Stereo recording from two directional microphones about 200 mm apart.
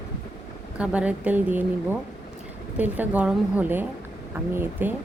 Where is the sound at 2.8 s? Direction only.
5° right (ahead or behind).